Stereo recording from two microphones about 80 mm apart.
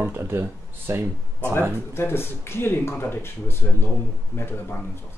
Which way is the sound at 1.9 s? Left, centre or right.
Left.